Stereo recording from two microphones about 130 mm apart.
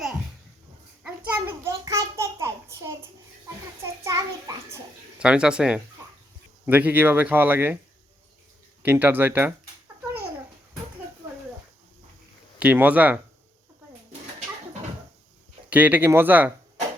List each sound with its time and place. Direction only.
1.0 s a sound: 20° right (ahead or behind)
4.0 s a sound: 25° right (ahead or behind)
5.2 s speech: 5° right (ahead or behind)
8.8 s speech: 15° right (ahead or behind)
12.5 s speech: 10° right (ahead or behind)
15.7 s speech: 15° right (ahead or behind)